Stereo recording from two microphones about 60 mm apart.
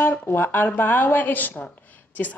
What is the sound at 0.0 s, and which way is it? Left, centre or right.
A woman's voice, left.